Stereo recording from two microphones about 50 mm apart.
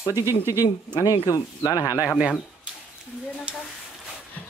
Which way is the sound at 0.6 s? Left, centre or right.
Left.